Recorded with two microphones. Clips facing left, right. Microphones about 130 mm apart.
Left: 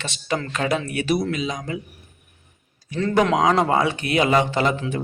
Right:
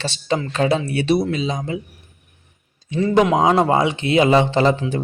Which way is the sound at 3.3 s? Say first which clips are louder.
Right 3 dB; 25° right (ahead or behind).